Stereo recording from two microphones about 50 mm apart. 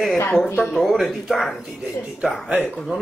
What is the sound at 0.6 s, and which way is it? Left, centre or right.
Speech, left.